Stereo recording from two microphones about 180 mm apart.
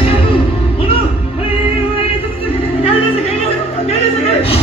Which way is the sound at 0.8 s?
30° left (ahead or behind).